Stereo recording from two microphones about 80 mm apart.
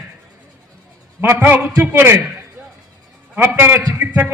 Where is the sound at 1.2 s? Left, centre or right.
Right.